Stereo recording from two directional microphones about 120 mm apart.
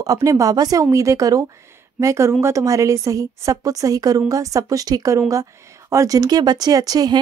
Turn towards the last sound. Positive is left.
turn(degrees=-30)  # may be behind; listen again after turning